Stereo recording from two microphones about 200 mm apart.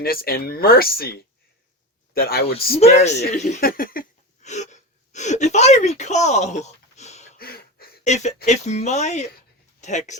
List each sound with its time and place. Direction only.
0.0 s speech: 50° left (ahead or behind)
2.7 s speech: 35° left (ahead or behind)
4.4 s speech: 35° left (ahead or behind)
7.3 s a sound: 50° left (ahead or behind)
8.0 s speech: 35° left (ahead or behind)